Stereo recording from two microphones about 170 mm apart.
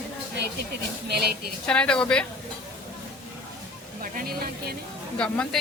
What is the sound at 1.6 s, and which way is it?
Speech, 5° left (ahead or behind).